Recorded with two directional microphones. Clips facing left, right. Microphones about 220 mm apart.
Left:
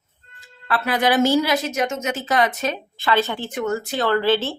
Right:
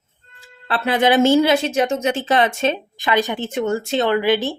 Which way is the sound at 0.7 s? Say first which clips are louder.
Right 3 dB; 25° right (ahead or behind).